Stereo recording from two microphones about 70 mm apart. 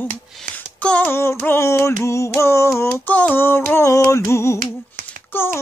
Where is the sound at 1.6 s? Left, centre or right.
Left.